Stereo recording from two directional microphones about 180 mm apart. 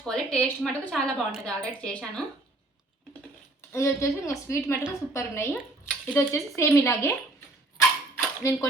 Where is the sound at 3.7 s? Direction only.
15° left (ahead or behind).